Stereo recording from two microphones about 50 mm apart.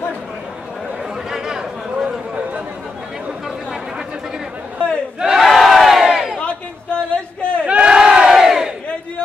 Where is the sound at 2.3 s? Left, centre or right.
Right.